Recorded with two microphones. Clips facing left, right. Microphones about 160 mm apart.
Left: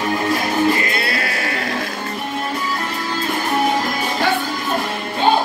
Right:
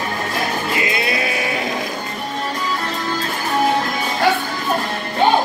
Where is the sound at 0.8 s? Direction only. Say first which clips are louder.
Right 1 dB; 20° right (ahead or behind).